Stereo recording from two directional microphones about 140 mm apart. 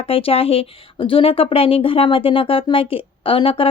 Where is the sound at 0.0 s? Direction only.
45° left (ahead or behind).